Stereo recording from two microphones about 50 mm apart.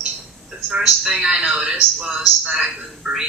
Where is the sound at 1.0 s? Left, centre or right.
Centre.